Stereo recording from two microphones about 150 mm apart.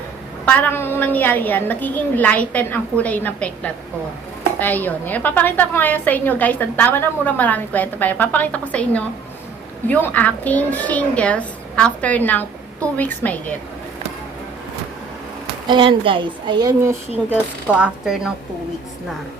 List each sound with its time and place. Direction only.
0.4 s a woman's voice: 10° left (ahead or behind)
15.6 s a woman's voice: 35° right (ahead or behind)
17.2 s speech: 10° right (ahead or behind)